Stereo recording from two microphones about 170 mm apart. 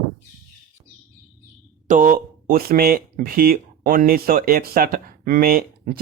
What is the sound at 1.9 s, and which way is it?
Speech, 55° right (ahead or behind).